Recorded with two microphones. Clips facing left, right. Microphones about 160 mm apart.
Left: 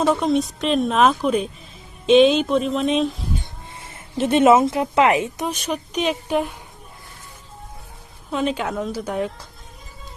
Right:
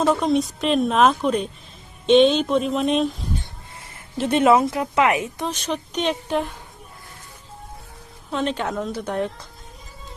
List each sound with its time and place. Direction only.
0.0 s speech: centre (ahead or behind)
4.2 s speech: 20° left (ahead or behind)
5.4 s a woman's voice: 10° left (ahead or behind)
8.3 s a woman's voice: 5° left (ahead or behind)